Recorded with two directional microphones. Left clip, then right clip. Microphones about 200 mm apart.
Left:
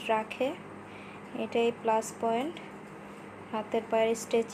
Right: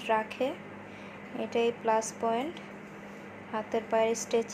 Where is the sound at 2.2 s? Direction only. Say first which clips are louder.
Even; centre (ahead or behind).